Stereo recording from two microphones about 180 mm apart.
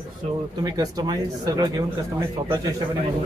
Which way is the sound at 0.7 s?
20° right (ahead or behind).